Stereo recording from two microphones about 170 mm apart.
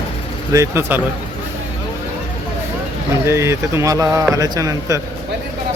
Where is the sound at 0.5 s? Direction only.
15° right (ahead or behind).